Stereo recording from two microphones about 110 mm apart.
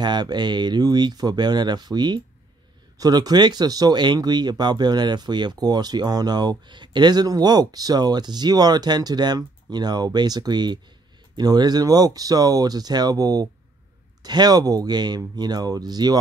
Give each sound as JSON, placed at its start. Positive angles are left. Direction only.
{"t": 0.0, "sound": "speech", "side_deg": -40}